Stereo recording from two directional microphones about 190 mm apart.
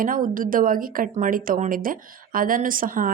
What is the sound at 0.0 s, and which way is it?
A woman's voice, 45° right (ahead or behind).